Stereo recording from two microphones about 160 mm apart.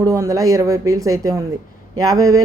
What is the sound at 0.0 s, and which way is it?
Speech, 20° right (ahead or behind).